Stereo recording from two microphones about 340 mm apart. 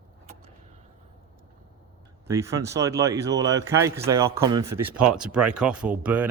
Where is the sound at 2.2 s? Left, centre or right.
Centre.